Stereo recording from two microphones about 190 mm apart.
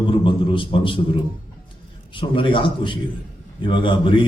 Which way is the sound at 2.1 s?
25° left (ahead or behind).